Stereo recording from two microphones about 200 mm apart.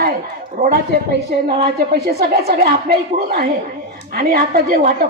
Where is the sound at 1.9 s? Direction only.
50° right (ahead or behind).